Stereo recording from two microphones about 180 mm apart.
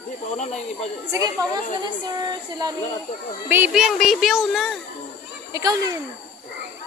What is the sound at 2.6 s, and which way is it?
Speech, 25° right (ahead or behind).